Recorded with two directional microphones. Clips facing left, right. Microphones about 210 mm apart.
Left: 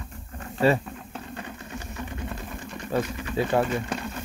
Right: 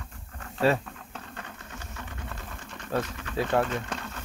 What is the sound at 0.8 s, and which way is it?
Sewing machine, 10° left (ahead or behind).